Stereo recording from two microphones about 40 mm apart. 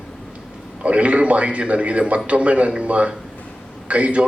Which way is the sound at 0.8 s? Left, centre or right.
Right.